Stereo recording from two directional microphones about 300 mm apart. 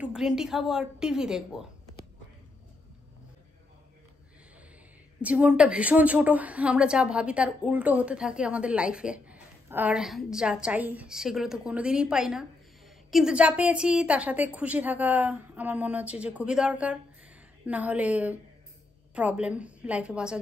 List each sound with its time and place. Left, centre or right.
0.0 s a woman's voice: centre
5.2 s a woman's voice: centre